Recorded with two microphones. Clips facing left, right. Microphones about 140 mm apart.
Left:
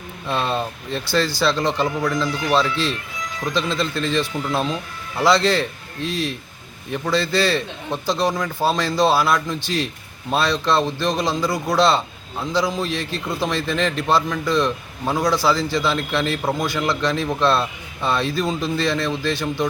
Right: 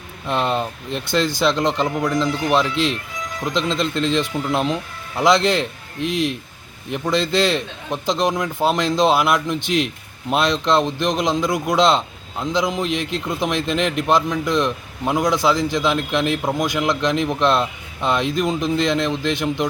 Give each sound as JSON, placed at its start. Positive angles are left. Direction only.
{"t": 0.3, "sound": "a man's voice", "side_deg": -15}